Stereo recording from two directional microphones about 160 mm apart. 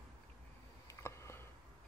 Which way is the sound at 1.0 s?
15° left (ahead or behind).